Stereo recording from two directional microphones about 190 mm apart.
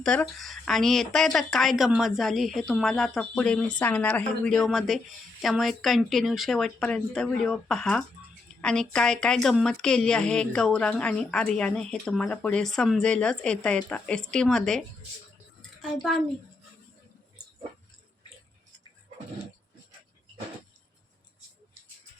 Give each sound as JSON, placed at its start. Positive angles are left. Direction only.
{"t": 0.0, "sound": "a woman's voice", "side_deg": 5}